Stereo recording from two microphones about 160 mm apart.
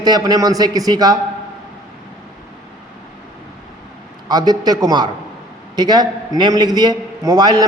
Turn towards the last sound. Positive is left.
turn(degrees=-25)  # may be behind; listen again after turning